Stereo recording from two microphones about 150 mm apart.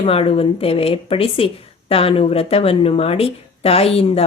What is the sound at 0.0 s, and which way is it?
Speech, 40° left (ahead or behind).